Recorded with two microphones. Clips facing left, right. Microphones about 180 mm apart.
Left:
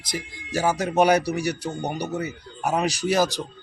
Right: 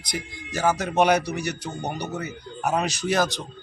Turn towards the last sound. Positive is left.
turn(degrees=10)  # may be behind; listen again after turning